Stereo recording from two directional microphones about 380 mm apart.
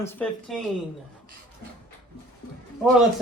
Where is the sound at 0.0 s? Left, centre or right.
Centre.